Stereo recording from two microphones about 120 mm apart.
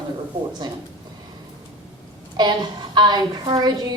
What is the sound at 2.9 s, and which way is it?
Speech, 40° right (ahead or behind).